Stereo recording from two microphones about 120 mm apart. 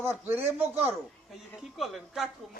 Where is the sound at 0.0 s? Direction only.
20° right (ahead or behind).